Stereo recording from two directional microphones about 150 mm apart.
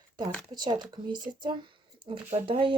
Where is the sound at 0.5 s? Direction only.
30° right (ahead or behind).